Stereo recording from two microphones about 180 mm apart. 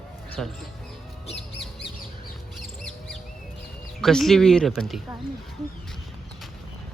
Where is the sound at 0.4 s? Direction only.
5° left (ahead or behind).